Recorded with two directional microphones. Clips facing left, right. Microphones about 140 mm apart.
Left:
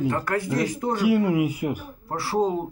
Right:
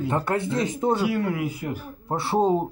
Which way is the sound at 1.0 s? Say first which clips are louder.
Left 4 dB; 15° left (ahead or behind).